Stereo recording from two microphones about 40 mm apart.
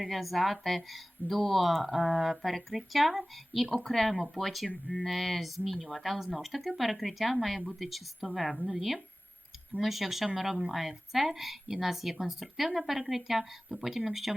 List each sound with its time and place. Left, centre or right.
0.0 s speech: centre